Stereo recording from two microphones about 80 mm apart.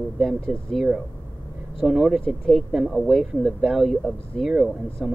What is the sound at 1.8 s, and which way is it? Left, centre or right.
Speech, centre.